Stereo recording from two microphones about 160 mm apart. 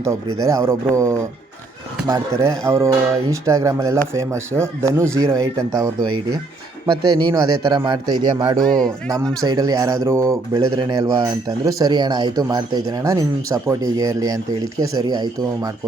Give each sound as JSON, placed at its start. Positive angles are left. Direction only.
{"t": 0.0, "sound": "speech", "side_deg": -20}
{"t": 8.6, "sound": "speech", "side_deg": 5}
{"t": 9.4, "sound": "speech", "side_deg": -25}